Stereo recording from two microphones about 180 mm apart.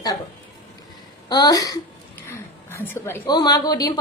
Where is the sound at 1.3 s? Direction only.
20° left (ahead or behind).